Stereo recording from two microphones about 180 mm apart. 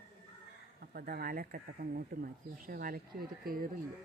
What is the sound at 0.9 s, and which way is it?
Speech, 55° right (ahead or behind).